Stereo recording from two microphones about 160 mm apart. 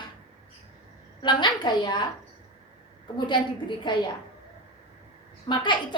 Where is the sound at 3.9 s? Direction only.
30° left (ahead or behind).